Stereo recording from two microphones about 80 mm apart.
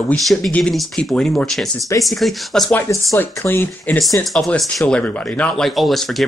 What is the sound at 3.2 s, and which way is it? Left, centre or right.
Speech, left.